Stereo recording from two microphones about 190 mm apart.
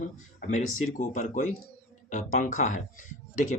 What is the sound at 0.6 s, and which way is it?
Speech, 90° left.